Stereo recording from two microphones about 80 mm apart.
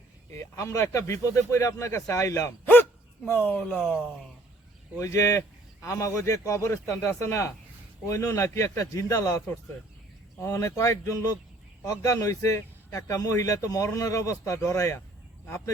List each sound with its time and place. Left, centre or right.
0.3 s speech: left
3.2 s speech: left
4.9 s speech: left
10.4 s speech: left